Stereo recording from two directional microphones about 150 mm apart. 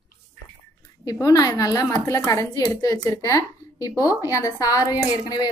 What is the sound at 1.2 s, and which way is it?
A woman's voice, 20° left (ahead or behind).